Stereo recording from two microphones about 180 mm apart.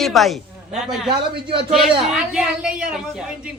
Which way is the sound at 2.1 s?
5° right (ahead or behind).